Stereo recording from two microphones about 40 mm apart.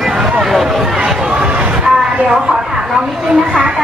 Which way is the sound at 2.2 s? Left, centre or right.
Right.